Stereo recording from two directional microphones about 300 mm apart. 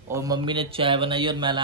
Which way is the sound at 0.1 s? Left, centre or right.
Centre.